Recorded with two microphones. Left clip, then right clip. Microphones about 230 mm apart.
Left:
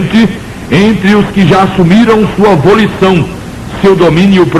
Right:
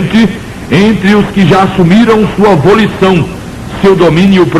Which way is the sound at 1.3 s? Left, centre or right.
Left.